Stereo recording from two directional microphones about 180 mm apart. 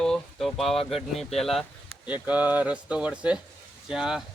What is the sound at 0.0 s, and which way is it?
Speech, centre (ahead or behind).